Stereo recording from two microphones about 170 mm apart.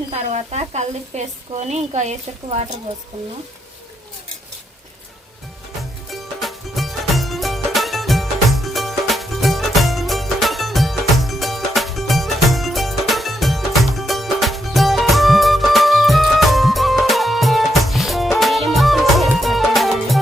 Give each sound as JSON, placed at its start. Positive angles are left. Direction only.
{"t": 0.1, "sound": "speech", "side_deg": -40}
{"t": 6.1, "sound": "music", "side_deg": 0}